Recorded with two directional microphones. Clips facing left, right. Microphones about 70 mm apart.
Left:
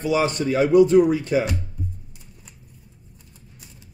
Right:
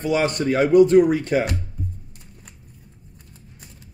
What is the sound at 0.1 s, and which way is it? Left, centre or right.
Speech, right.